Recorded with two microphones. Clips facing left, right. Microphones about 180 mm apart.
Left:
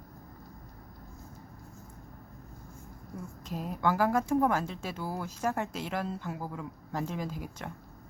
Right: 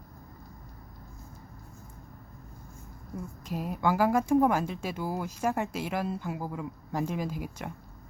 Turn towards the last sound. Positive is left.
turn(degrees=-10)  # may be behind; listen again after turning